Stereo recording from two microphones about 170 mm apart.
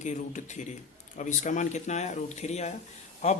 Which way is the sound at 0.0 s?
45° left (ahead or behind).